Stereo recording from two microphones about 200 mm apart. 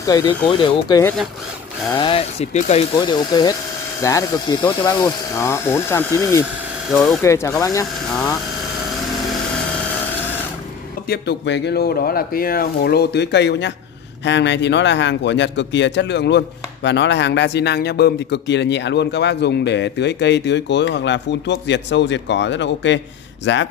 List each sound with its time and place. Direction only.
0.0 s speech: 20° left (ahead or behind)
11.1 s a man's voice: 60° left (ahead or behind)